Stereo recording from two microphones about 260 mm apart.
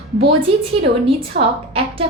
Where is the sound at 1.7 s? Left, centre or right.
Right.